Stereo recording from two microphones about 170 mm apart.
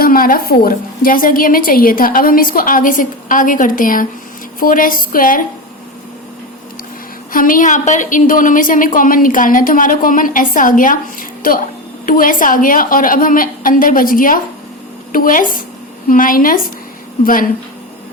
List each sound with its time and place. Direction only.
0.0 s a woman's voice: 60° left (ahead or behind)
7.3 s a woman's voice: 55° left (ahead or behind)